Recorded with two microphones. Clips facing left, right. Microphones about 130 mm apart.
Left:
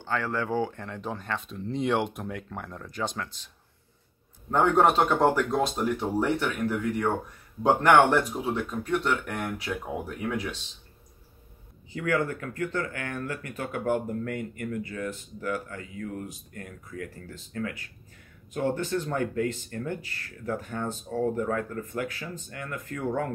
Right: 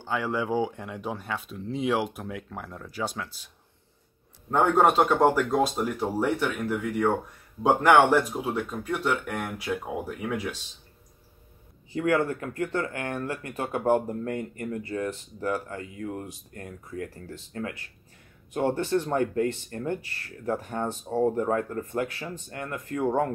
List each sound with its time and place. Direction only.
0.0 s speech: 15° right (ahead or behind)
4.5 s speech: 5° right (ahead or behind)
11.9 s speech: 30° right (ahead or behind)